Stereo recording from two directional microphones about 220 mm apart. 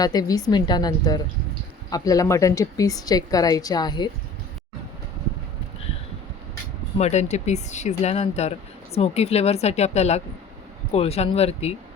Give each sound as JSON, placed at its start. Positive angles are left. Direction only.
{"t": 0.0, "sound": "a woman's voice", "side_deg": 15}
{"t": 7.0, "sound": "speech", "side_deg": 30}